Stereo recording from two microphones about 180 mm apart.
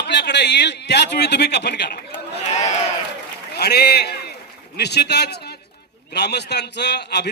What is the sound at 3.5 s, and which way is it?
A man's voice, 65° left (ahead or behind).